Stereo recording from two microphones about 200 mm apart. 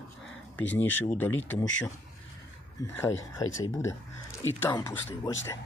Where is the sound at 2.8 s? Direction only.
15° left (ahead or behind).